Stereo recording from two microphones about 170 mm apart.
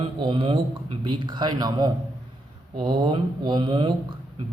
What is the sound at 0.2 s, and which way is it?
A man's voice, 30° right (ahead or behind).